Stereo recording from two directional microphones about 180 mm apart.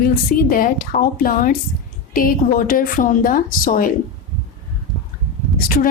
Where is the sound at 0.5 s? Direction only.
55° left (ahead or behind).